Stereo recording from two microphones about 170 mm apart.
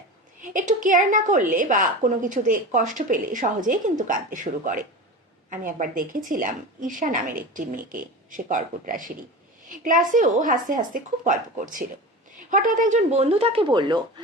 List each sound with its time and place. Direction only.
0.4 s a woman's voice: 50° right (ahead or behind); by 14.0 s 25° right (ahead or behind)